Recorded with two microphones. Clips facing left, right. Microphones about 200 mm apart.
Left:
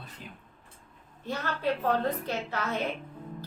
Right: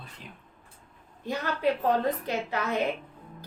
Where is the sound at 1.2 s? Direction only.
15° right (ahead or behind).